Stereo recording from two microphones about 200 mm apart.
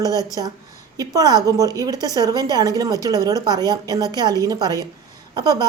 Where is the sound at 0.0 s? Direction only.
20° right (ahead or behind).